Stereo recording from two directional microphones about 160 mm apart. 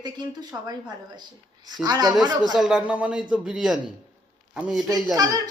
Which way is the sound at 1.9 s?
25° right (ahead or behind).